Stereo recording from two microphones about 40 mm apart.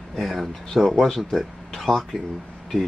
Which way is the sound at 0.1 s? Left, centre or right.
Centre.